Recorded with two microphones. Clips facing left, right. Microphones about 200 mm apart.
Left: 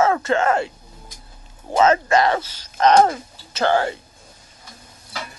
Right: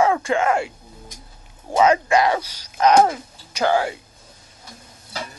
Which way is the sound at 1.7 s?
10° right (ahead or behind).